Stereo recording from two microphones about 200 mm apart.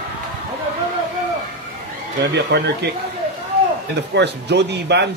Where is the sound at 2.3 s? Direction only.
60° right (ahead or behind).